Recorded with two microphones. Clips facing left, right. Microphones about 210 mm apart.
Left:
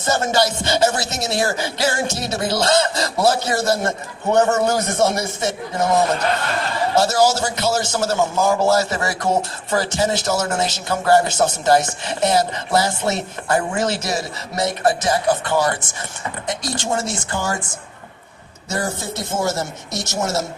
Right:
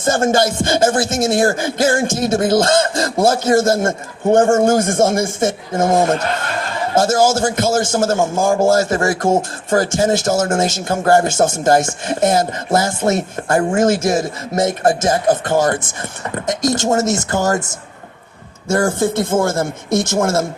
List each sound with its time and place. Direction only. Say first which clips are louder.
0.0 s a man's voice: right 4 dB; 50° right (ahead or behind)
18.7 s a man's voice: right 9 dB; 50° right (ahead or behind)